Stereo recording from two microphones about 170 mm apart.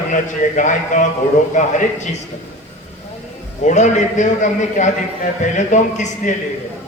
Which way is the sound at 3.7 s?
45° left (ahead or behind).